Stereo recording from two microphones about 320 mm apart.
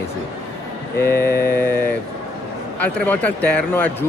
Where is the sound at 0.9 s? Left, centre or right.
Centre.